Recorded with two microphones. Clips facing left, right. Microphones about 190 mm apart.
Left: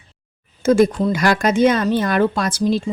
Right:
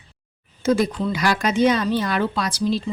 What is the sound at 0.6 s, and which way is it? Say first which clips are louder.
Speech: left 5 dB; 50° left (ahead or behind).